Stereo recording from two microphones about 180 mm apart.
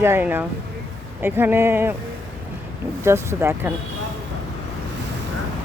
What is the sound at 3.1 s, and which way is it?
Speech, 15° right (ahead or behind).